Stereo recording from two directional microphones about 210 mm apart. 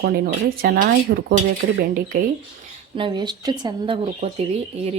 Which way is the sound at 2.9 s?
20° right (ahead or behind).